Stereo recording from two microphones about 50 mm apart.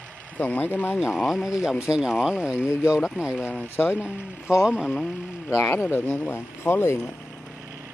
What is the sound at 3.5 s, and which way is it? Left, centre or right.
Speech, left.